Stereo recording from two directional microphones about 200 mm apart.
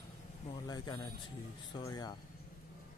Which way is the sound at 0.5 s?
20° left (ahead or behind).